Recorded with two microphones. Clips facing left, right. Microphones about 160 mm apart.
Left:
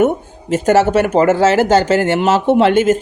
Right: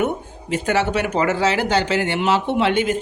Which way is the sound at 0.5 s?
45° left (ahead or behind).